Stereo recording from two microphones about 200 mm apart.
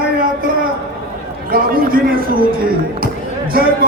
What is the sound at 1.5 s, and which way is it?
Speech, 45° right (ahead or behind).